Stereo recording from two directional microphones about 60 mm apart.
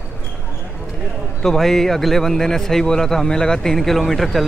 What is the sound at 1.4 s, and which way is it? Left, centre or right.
A man's voice, centre.